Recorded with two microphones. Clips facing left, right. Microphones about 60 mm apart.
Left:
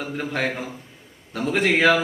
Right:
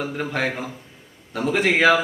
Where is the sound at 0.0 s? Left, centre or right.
Centre.